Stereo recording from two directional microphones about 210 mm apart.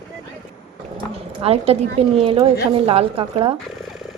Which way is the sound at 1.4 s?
30° right (ahead or behind).